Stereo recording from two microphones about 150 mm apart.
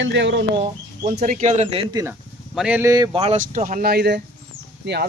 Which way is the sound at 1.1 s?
65° right (ahead or behind).